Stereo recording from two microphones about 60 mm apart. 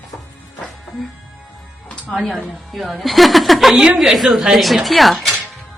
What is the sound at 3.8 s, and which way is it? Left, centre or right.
A woman's voice, centre.